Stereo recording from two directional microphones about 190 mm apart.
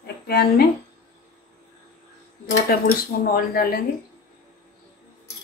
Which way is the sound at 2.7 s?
50° left (ahead or behind).